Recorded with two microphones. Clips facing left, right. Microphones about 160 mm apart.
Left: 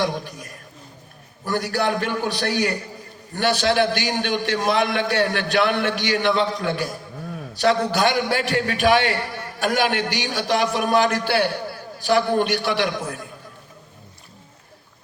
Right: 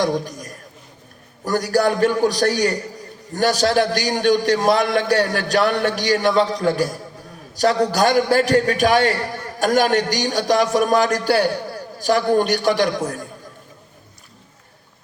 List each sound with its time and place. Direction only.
0.0 s a man's voice: 40° right (ahead or behind)